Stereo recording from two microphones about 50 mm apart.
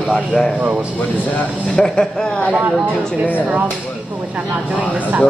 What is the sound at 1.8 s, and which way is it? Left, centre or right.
Speech, centre.